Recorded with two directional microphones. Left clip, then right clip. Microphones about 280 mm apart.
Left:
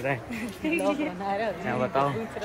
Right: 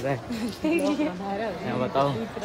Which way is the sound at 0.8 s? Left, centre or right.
Left.